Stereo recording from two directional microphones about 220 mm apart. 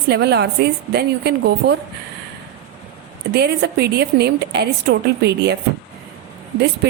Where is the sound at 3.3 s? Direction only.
50° right (ahead or behind).